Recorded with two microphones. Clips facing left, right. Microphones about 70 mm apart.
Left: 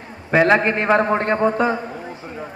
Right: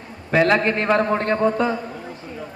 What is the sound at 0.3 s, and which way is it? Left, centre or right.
A man's voice, left.